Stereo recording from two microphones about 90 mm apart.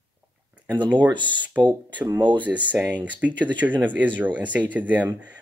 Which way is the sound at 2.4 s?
15° right (ahead or behind).